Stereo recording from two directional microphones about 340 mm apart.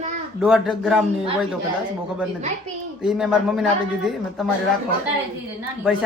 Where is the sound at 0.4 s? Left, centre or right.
Centre.